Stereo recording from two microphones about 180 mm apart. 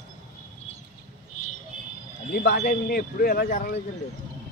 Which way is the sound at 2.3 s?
60° left (ahead or behind).